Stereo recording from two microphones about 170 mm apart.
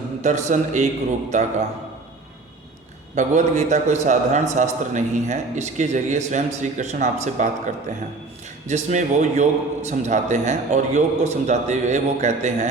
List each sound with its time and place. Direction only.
0.2 s a man's voice: 45° right (ahead or behind)
3.2 s a man's voice: 45° right (ahead or behind)
8.6 s a man's voice: 45° right (ahead or behind)